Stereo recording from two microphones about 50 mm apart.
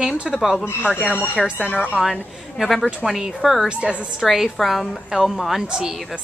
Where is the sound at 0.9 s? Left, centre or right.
Left.